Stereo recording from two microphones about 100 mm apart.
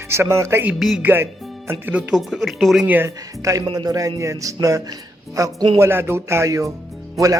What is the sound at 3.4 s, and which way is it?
A man's voice, 40° right (ahead or behind).